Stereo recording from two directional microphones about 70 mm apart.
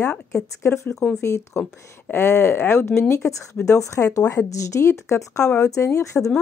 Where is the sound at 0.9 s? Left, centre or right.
Centre.